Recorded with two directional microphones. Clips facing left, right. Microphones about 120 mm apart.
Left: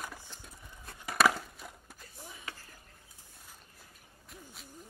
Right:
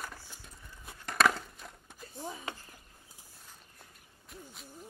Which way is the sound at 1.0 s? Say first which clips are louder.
Even; 5° left (ahead or behind).